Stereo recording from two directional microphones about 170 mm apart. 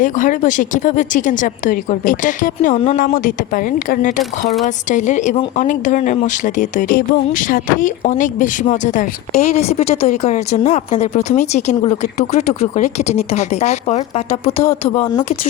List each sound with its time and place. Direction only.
0.0 s a woman's voice: 50° left (ahead or behind)